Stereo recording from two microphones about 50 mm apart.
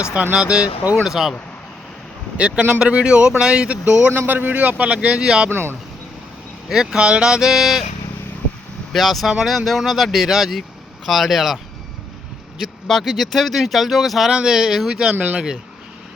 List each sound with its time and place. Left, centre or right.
0.0 s speech: right
1.0 s speech: centre
2.4 s speech: right
4.3 s speech: right; by 5.5 s centre
5.5 s speech: right
6.7 s speech: centre
8.9 s speech: centre
12.9 s speech: centre
15.1 s speech: right